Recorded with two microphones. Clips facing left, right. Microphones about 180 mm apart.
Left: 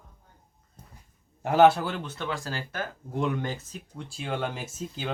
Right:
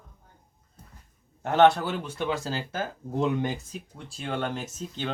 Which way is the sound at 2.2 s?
20° right (ahead or behind).